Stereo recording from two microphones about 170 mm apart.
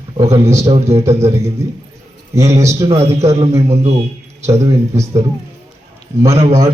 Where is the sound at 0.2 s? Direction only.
15° right (ahead or behind).